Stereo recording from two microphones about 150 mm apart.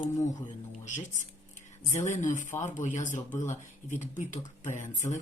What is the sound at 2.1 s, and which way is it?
Speech, 55° left (ahead or behind).